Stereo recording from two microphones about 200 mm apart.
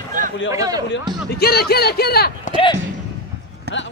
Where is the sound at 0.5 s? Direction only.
15° right (ahead or behind).